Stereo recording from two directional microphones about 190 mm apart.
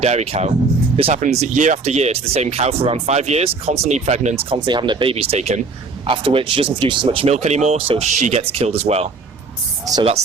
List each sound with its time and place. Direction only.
0.0 s speech: 35° right (ahead or behind)
9.8 s speech: 20° right (ahead or behind)